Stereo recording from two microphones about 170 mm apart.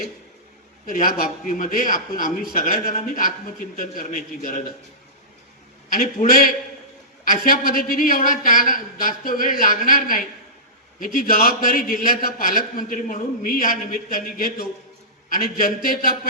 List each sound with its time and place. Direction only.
0.9 s a man's voice: 55° left (ahead or behind)
5.9 s a woman's voice: 55° left (ahead or behind)